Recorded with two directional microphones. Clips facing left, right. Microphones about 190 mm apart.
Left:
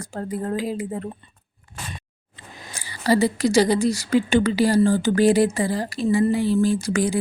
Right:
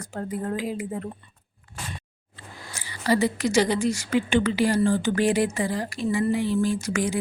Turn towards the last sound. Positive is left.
turn(degrees=35)  # may be behind; listen again after turning